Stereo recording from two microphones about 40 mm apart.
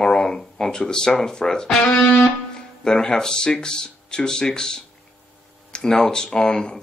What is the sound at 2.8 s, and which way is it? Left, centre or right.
Speech, centre.